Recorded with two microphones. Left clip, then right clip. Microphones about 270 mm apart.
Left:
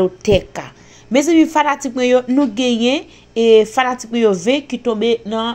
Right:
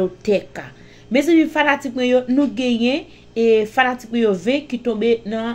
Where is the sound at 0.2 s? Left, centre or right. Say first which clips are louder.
Left 4 dB; left.